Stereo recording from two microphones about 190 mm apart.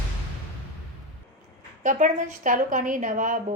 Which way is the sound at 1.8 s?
40° right (ahead or behind).